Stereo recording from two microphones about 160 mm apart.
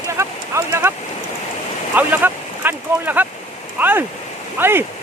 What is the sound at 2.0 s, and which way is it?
Speech, 10° right (ahead or behind).